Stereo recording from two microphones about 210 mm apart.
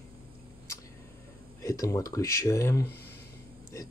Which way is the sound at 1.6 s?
15° left (ahead or behind).